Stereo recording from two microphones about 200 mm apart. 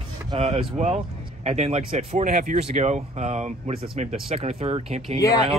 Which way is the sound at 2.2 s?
40° right (ahead or behind).